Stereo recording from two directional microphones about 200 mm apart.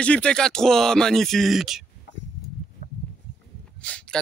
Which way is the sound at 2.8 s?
40° left (ahead or behind).